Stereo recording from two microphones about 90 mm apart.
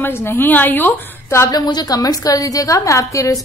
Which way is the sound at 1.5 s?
45° left (ahead or behind).